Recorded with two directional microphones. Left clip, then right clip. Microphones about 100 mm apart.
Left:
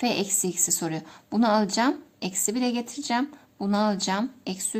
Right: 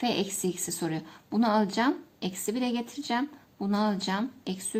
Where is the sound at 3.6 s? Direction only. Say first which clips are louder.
Left 4 dB; 45° left (ahead or behind).